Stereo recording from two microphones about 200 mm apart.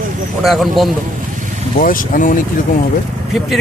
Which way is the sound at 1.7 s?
45° left (ahead or behind).